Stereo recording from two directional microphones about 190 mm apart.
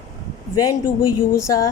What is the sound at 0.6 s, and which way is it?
A woman's voice, 20° left (ahead or behind).